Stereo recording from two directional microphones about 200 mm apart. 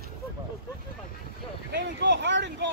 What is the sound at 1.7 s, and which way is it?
Speech, 60° right (ahead or behind).